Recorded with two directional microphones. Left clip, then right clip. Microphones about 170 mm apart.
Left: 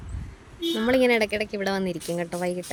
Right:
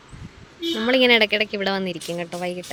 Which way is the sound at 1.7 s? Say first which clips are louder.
Right 1 dB; 15° left (ahead or behind).